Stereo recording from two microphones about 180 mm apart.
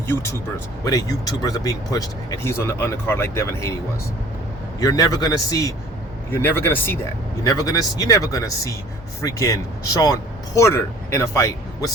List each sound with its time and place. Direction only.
0.1 s speech: 15° left (ahead or behind)
4.8 s a man's voice: 20° left (ahead or behind)